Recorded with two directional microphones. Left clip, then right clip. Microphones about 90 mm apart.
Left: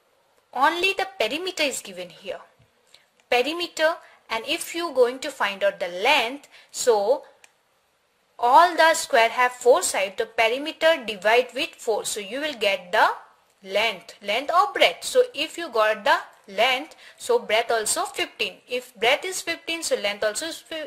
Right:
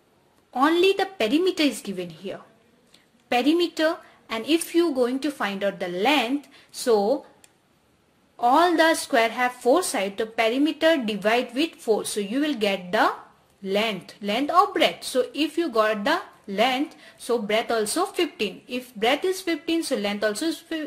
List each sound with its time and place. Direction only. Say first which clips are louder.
0.5 s a woman's voice: right 1 dB; 45° left (ahead or behind)
8.5 s a woman's voice: left 4 dB; 45° left (ahead or behind)
10.2 s a woman's voice: right 1 dB; 50° left (ahead or behind)
20.0 s speech: even; 30° left (ahead or behind)